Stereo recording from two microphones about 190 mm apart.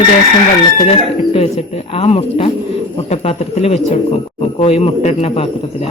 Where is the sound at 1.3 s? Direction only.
30° left (ahead or behind).